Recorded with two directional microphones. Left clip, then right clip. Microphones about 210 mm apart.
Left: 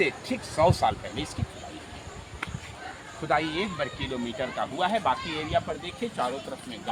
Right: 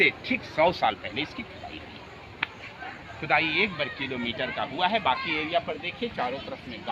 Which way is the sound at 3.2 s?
35° left (ahead or behind).